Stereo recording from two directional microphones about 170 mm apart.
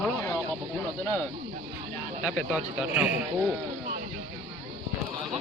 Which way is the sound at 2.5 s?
5° right (ahead or behind).